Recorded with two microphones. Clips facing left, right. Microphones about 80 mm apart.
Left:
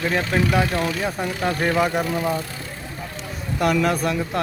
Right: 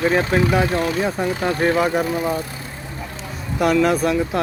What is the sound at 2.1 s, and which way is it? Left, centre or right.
Speech, centre.